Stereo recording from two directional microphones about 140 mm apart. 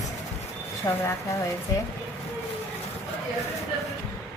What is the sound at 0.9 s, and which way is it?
Speech, 25° left (ahead or behind).